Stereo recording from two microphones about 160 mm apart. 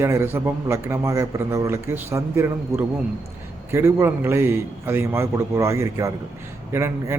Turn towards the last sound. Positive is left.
turn(degrees=-15)  # may be behind; listen again after turning